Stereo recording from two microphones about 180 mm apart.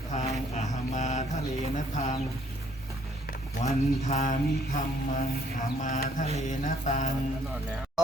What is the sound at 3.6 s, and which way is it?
Speech, 35° left (ahead or behind).